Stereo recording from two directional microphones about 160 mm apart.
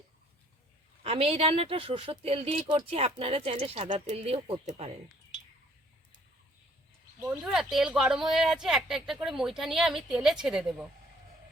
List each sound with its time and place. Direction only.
1.0 s a woman's voice: 35° right (ahead or behind)
7.2 s speech: 5° right (ahead or behind)